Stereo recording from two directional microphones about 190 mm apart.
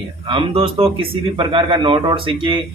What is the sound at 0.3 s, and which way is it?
A man's voice, 30° right (ahead or behind).